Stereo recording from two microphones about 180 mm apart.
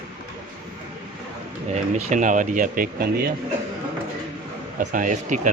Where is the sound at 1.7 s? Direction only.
40° right (ahead or behind).